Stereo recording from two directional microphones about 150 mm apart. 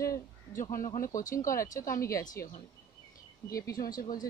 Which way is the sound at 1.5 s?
20° left (ahead or behind).